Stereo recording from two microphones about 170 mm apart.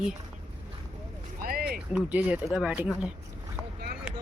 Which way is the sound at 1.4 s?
60° right (ahead or behind).